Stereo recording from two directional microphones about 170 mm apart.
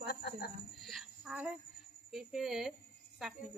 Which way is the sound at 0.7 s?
Centre (ahead or behind).